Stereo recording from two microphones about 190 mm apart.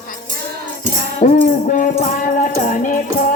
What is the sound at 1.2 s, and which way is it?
Music, 40° left (ahead or behind).